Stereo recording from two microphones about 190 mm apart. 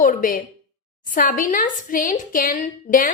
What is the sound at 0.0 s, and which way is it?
A woman's voice, 45° left (ahead or behind).